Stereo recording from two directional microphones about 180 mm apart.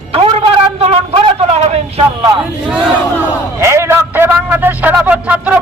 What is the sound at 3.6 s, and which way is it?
A man's voice, 15° right (ahead or behind).